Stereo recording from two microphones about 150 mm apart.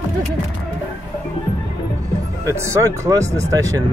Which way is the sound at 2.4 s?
20° right (ahead or behind).